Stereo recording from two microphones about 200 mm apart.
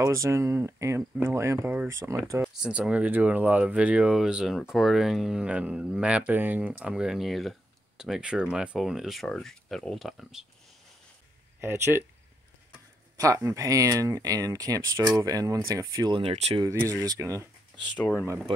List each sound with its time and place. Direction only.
0.0 s speech: 15° right (ahead or behind)
11.6 s speech: 10° right (ahead or behind)
13.2 s speech: 15° right (ahead or behind); by 16.6 s 30° right (ahead or behind)
17.0 s speech: 15° right (ahead or behind)